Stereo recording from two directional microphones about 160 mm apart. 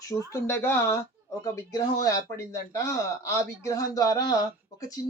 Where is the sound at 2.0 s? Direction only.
20° left (ahead or behind).